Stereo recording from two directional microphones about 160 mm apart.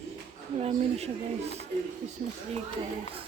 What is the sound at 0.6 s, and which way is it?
Speech, 45° right (ahead or behind).